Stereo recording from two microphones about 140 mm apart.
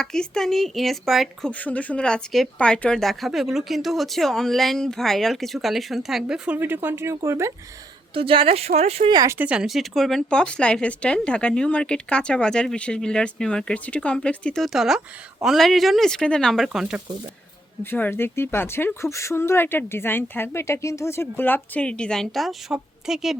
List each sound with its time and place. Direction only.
0.0 s speech: 5° left (ahead or behind); by 7.5 s 20° right (ahead or behind)
8.1 s speech: 40° right (ahead or behind)
9.0 s speech: 25° right (ahead or behind); by 17.0 s 5° right (ahead or behind)
17.9 s speech: 15° left (ahead or behind); by 23.4 s 5° right (ahead or behind)